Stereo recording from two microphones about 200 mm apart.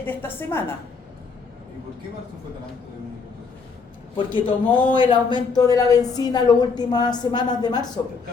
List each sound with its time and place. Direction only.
0.0 s a woman's voice: 10° left (ahead or behind)
4.3 s speech: 25° left (ahead or behind)